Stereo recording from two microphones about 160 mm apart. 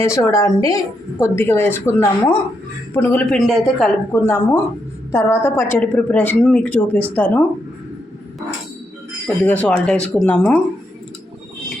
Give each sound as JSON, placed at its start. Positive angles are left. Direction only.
{"t": 0.0, "sound": "a woman's voice", "side_deg": 20}
{"t": 4.1, "sound": "a woman's voice", "side_deg": 15}
{"t": 9.2, "sound": "a woman's voice", "side_deg": 10}